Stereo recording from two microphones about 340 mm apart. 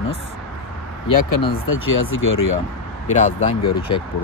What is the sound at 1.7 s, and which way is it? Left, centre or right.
Speech, left.